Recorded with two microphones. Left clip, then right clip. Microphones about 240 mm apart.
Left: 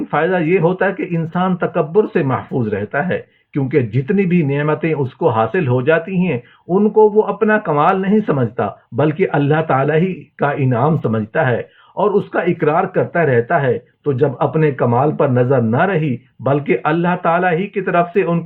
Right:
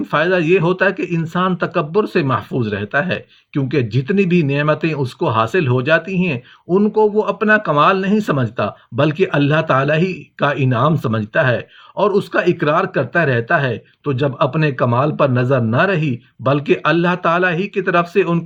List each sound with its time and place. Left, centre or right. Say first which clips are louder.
0.1 s speech: right 1 dB; right